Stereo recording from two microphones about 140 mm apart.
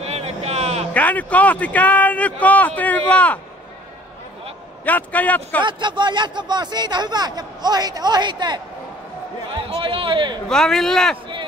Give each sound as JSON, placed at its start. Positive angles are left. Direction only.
{"t": 0.0, "sound": "a sound", "side_deg": -50}
{"t": 0.9, "sound": "a man's voice", "side_deg": 10}
{"t": 4.8, "sound": "a man's voice", "side_deg": 10}
{"t": 5.6, "sound": "speech", "side_deg": -35}
{"t": 9.8, "sound": "speech", "side_deg": -40}
{"t": 10.5, "sound": "speech", "side_deg": 5}